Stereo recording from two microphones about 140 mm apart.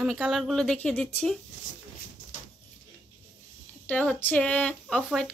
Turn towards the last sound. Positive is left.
turn(degrees=5)  # may be behind; listen again after turning